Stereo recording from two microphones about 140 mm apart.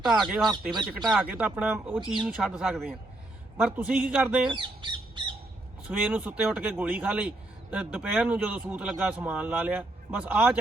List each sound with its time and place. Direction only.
0.0 s a man's voice: 5° right (ahead or behind)
4.4 s speech: 35° right (ahead or behind)
6.0 s a man's voice: 10° right (ahead or behind)